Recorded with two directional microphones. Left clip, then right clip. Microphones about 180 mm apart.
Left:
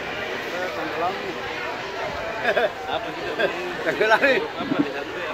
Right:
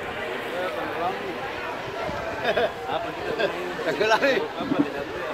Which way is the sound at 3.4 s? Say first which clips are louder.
Left 3 dB; 20° left (ahead or behind).